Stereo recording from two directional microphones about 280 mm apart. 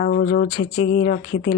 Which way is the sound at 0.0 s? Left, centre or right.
Left.